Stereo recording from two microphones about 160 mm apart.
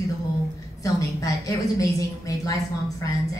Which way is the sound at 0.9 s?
20° left (ahead or behind).